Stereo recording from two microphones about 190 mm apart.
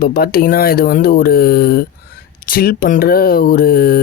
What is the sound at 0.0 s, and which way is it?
Speech, 50° left (ahead or behind).